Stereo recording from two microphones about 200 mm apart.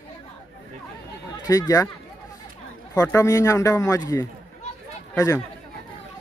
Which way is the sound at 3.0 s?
15° left (ahead or behind).